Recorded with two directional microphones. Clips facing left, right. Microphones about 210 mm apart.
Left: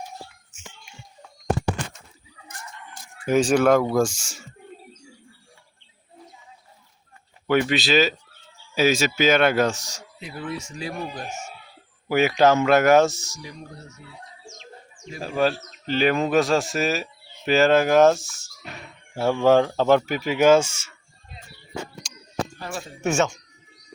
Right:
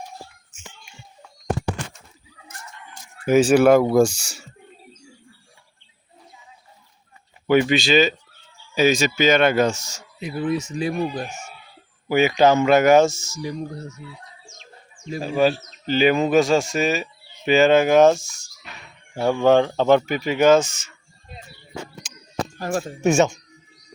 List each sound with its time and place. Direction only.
3.2 s speech: 5° right (ahead or behind)
7.4 s speech: centre (ahead or behind)
10.2 s speech: 20° right (ahead or behind)
12.0 s speech: centre (ahead or behind)
13.4 s speech: 40° right (ahead or behind)
14.6 s bird: 20° left (ahead or behind)
15.2 s speech: centre (ahead or behind)
22.0 s a sound: 5° right (ahead or behind)
22.5 s speech: 45° right (ahead or behind)
23.0 s speech: 15° right (ahead or behind)